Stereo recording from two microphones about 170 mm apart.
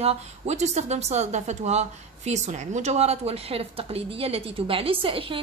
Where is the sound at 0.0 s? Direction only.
40° right (ahead or behind).